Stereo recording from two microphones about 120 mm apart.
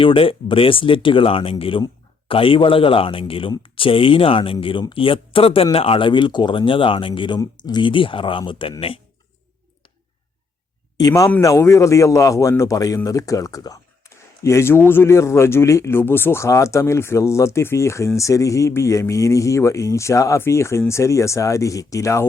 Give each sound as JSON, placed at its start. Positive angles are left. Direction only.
{"t": 0.0, "sound": "speech", "side_deg": 50}
{"t": 10.9, "sound": "speech", "side_deg": 30}